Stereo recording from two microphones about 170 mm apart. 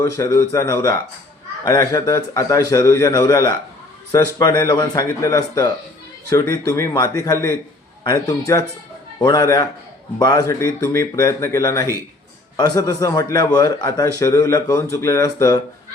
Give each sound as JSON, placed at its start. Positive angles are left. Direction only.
{"t": 0.0, "sound": "speech", "side_deg": 20}